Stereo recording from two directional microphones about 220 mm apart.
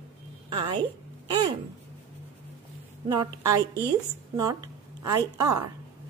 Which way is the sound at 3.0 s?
15° right (ahead or behind).